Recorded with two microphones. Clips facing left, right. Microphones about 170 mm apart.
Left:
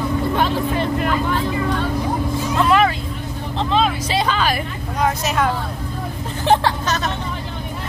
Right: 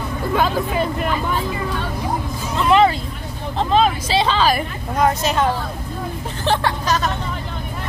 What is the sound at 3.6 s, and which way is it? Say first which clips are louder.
Speech: right 2 dB; 45° right (ahead or behind).